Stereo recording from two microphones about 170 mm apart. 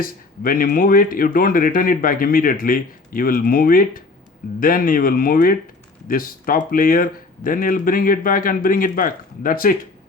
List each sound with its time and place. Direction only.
0.0 s speech: 55° left (ahead or behind)